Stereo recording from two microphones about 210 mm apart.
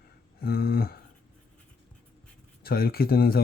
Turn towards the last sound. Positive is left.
turn(degrees=45)  # may be behind; listen again after turning